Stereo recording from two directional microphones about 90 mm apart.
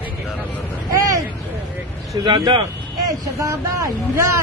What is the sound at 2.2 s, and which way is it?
Speech, 65° right (ahead or behind).